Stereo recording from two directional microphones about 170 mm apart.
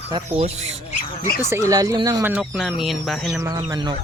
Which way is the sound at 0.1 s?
35° right (ahead or behind).